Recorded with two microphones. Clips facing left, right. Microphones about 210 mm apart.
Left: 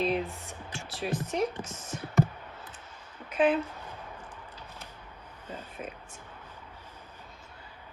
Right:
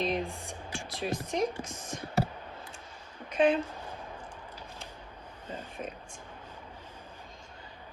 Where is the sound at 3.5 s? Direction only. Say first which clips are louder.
Left 1 dB; 30° right (ahead or behind).